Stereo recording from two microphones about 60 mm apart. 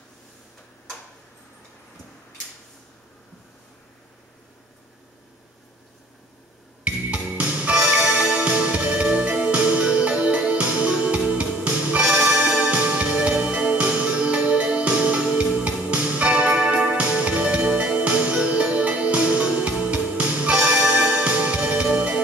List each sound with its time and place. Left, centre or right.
6.9 s music: centre